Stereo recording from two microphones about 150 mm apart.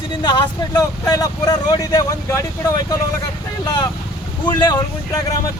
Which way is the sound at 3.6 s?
30° left (ahead or behind).